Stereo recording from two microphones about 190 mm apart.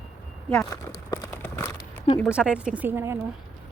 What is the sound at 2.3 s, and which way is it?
Speech, 5° right (ahead or behind).